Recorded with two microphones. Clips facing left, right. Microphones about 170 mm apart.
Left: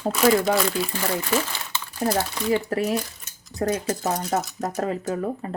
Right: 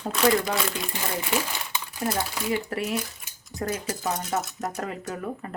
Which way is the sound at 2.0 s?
30° left (ahead or behind).